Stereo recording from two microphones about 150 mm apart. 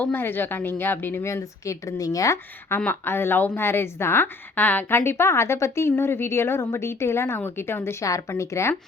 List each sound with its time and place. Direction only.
0.0 s a woman's voice: 15° left (ahead or behind)